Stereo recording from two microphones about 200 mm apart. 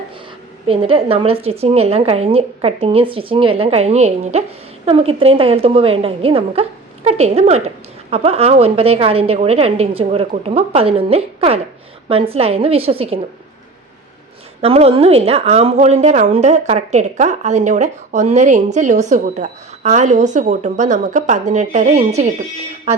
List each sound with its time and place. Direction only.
0.7 s speech: 25° right (ahead or behind)
14.6 s a woman's voice: 30° right (ahead or behind)